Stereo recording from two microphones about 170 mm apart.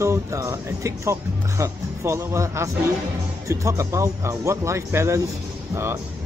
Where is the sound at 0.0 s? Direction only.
15° right (ahead or behind).